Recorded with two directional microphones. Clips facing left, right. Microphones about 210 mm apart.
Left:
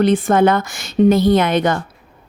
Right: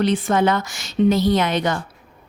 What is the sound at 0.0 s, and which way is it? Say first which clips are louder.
Speech: left 5 dB; 50° left (ahead or behind).